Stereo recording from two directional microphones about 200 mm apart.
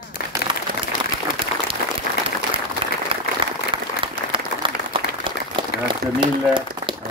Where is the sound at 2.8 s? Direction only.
30° right (ahead or behind).